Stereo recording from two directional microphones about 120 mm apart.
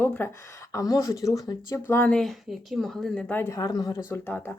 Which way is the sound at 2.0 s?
5° left (ahead or behind).